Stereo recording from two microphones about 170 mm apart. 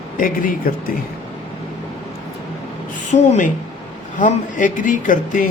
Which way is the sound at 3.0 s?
45° left (ahead or behind).